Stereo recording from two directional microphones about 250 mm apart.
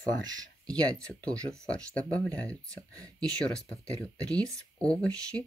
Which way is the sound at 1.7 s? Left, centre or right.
Centre.